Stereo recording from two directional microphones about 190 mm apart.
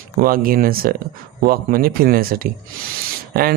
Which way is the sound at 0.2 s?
50° right (ahead or behind).